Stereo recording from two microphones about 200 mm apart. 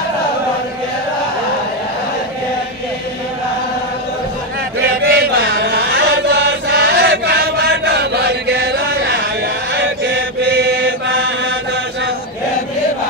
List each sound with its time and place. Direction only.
4.8 s chant: 55° right (ahead or behind)
9.8 s mantra: 60° right (ahead or behind)